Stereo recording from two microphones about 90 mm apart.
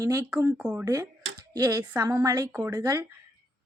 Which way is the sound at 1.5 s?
50° right (ahead or behind).